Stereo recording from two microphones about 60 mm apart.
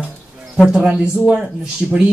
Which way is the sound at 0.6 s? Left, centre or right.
Centre.